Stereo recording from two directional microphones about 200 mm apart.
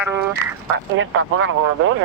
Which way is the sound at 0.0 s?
10° right (ahead or behind).